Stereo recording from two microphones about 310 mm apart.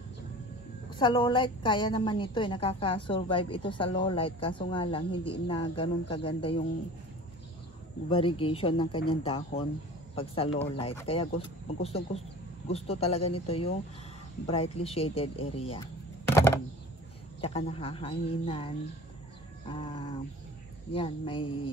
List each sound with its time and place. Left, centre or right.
0.8 s speech: centre
8.1 s speech: centre
17.4 s speech: centre